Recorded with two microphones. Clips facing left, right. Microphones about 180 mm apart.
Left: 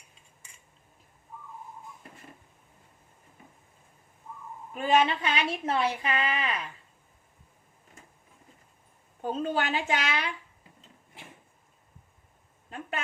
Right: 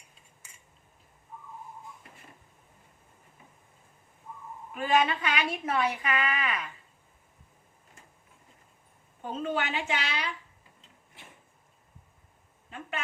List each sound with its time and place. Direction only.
4.7 s a woman's voice: 25° left (ahead or behind)
9.2 s a woman's voice: 40° left (ahead or behind)